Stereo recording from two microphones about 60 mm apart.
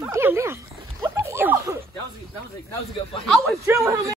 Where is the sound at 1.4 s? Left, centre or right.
Right.